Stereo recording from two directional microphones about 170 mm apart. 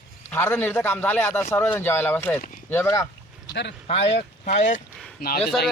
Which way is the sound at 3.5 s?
90° left.